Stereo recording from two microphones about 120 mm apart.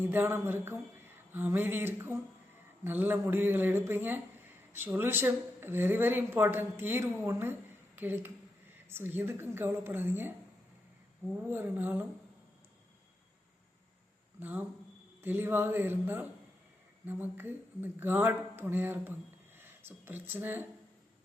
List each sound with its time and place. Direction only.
0.0 s a man's voice: 15° right (ahead or behind)
11.4 s a man's voice: 15° right (ahead or behind)
14.3 s a man's voice: 15° right (ahead or behind)